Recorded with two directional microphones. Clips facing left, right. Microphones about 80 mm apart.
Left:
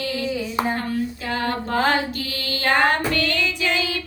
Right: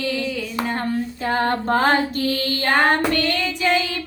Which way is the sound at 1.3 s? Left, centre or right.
Right.